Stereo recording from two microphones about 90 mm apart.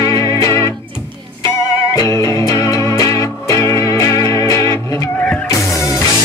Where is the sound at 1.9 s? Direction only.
40° left (ahead or behind).